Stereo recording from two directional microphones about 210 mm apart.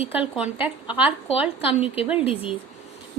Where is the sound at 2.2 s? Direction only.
25° left (ahead or behind).